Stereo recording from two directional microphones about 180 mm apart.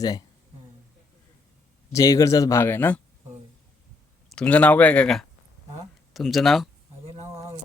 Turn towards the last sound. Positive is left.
turn(degrees=0)  # may be behind; listen again after turning